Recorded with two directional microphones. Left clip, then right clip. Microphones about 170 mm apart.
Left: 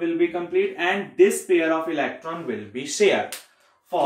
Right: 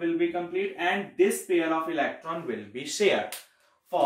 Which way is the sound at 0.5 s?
5° right (ahead or behind).